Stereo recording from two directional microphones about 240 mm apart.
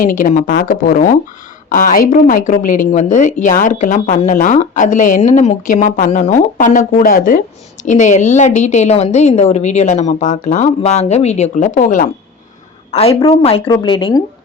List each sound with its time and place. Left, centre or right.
0.0 s a woman's voice: left; by 14.2 s centre